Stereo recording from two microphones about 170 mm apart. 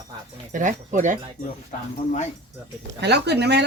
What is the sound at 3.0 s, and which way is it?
Speech, 75° right (ahead or behind).